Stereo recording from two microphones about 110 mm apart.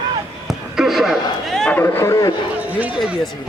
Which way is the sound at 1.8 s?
20° left (ahead or behind).